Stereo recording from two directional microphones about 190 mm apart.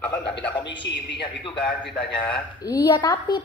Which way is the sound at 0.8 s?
65° left (ahead or behind).